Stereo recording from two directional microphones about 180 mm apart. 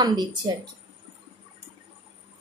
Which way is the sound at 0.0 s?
20° right (ahead or behind).